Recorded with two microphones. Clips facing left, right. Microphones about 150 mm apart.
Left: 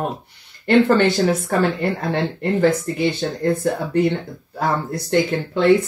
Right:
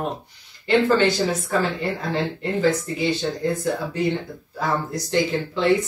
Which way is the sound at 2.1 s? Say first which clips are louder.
Left 3 dB; 60° left (ahead or behind).